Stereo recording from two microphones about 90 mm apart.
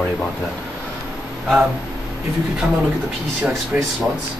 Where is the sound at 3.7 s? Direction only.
15° right (ahead or behind).